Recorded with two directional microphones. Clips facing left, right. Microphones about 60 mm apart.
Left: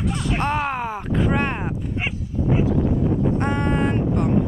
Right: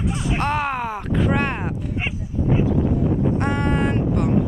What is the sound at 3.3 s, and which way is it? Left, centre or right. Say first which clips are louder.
Vehicle: even; centre.